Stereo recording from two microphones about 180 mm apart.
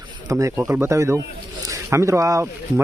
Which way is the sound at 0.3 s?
20° right (ahead or behind).